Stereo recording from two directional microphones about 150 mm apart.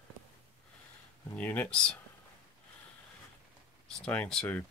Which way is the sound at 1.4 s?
10° left (ahead or behind).